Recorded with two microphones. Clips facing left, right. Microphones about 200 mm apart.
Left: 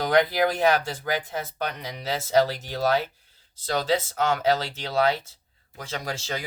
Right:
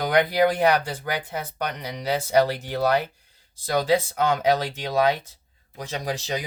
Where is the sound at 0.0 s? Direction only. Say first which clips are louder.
Right 1 dB; 15° right (ahead or behind).